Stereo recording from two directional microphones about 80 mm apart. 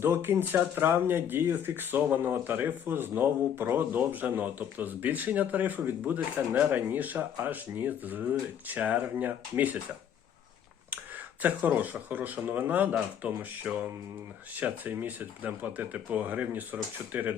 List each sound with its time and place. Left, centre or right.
0.0 s speech: right
11.4 s speech: right